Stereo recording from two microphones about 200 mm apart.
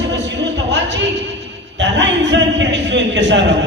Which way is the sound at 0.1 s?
60° right (ahead or behind).